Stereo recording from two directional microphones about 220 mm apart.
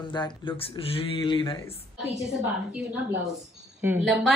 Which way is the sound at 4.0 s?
Centre (ahead or behind).